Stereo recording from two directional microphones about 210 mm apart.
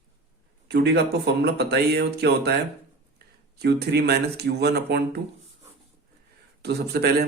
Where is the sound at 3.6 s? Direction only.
50° right (ahead or behind).